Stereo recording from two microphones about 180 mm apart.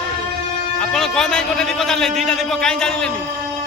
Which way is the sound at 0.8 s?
5° left (ahead or behind).